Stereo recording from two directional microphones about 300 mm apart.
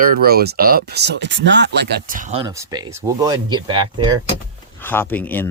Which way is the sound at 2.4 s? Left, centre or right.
Centre.